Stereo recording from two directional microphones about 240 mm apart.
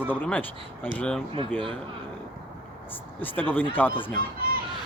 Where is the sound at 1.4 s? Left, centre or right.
Right.